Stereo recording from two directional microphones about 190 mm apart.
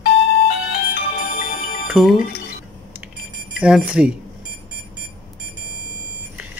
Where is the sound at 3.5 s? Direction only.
5° right (ahead or behind).